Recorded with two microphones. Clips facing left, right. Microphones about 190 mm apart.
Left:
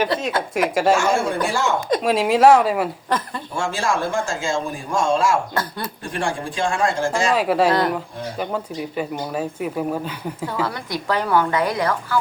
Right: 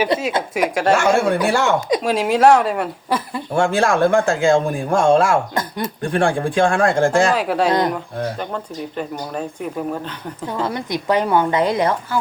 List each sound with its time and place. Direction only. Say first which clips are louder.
0.5 s speech: even; centre (ahead or behind)
0.9 s speech: right 4 dB; 65° right (ahead or behind)
1.9 s speech: even; centre (ahead or behind)
3.1 s speech: right 2 dB; 10° right (ahead or behind)
3.5 s speech: right 6 dB; 55° right (ahead or behind)
5.5 s speech: right 3 dB; 20° right (ahead or behind)
6.0 s speech: right 8 dB; 55° right (ahead or behind)
7.3 s speech: even; centre (ahead or behind)
10.4 s a woman's voice: right 3 dB; 20° right (ahead or behind)